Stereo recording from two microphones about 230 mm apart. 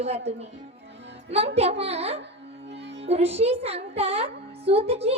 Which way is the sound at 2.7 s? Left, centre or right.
Right.